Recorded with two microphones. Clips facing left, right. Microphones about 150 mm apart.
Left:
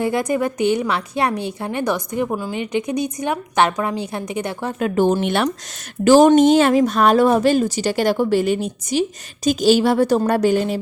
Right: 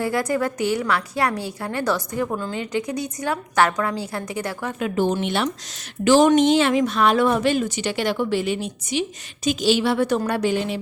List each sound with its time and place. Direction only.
0.0 s a woman's voice: 20° left (ahead or behind)
4.8 s speech: 50° left (ahead or behind)
6.1 s speech: 40° left (ahead or behind)